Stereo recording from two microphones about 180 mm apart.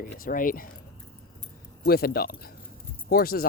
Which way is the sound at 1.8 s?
60° left (ahead or behind).